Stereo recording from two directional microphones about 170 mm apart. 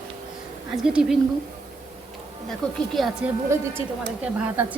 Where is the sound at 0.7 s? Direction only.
5° right (ahead or behind).